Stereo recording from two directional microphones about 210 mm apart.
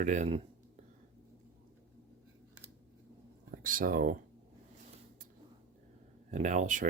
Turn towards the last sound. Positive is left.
turn(degrees=-35)  # may be behind; listen again after turning